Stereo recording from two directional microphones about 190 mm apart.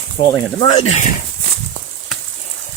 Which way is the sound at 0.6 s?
30° left (ahead or behind).